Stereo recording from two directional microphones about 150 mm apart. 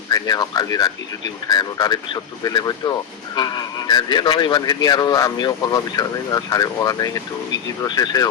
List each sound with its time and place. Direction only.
0.1 s speech: 25° left (ahead or behind)